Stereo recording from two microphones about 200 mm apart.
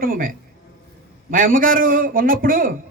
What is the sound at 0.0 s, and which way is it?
A man's voice, 45° right (ahead or behind).